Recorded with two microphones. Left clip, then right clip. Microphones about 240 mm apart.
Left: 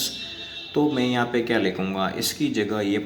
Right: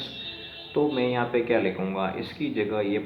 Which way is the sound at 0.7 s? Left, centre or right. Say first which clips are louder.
Left 2 dB; left.